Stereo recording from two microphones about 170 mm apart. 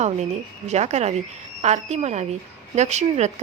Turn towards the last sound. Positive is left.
turn(degrees=-40)  # may be behind; listen again after turning